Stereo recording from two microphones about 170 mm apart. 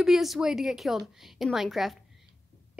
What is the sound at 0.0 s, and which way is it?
A woman's voice, centre (ahead or behind).